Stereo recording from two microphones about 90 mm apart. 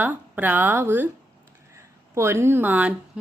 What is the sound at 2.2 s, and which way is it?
Speech, 30° right (ahead or behind).